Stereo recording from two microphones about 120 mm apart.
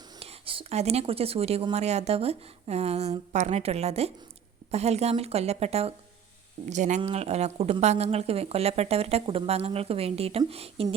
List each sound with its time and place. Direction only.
0.2 s a woman's voice: 50° right (ahead or behind)
6.7 s a woman's voice: 85° right; by 10.8 s 55° right (ahead or behind)